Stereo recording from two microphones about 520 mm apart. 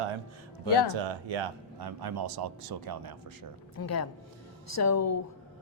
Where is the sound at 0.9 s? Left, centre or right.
Right.